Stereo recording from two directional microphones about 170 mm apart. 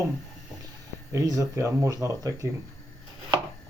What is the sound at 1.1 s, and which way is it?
Speech, 20° right (ahead or behind).